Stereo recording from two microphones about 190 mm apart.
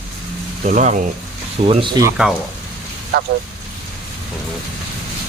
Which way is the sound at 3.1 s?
55° right (ahead or behind).